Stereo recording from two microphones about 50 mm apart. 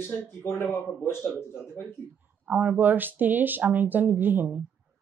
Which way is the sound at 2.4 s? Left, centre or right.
Right.